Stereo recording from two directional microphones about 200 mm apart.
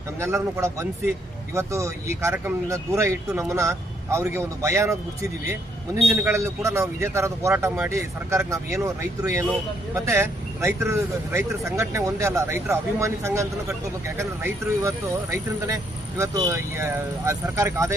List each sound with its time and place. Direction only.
0.2 s speech: 10° right (ahead or behind)
6.1 s speech: 10° right (ahead or behind)